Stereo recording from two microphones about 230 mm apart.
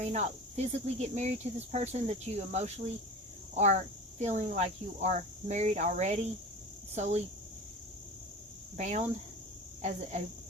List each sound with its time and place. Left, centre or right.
0.0 s speech: right
8.7 s speech: right